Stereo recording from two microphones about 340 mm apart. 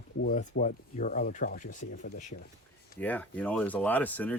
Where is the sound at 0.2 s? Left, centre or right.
Left.